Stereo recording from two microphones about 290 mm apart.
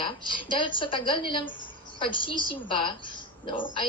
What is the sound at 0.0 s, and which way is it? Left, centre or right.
A woman's voice, centre.